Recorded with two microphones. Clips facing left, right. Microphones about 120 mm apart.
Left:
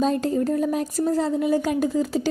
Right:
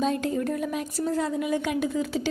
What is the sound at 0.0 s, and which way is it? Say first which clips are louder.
A woman's voice: left 4 dB; 35° left (ahead or behind).